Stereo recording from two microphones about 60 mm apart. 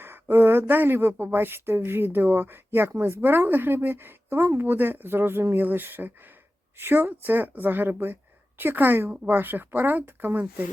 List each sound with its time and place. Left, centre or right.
0.0 s a woman's voice: right